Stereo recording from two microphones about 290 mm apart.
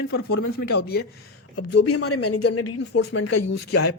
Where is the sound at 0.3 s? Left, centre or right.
Left.